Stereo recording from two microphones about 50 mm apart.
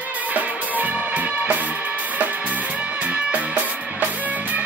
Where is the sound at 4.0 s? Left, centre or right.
Right.